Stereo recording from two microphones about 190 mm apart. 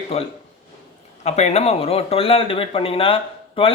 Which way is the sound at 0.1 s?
30° left (ahead or behind).